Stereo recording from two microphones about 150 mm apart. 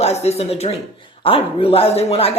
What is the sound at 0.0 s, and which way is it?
Speech, 45° left (ahead or behind).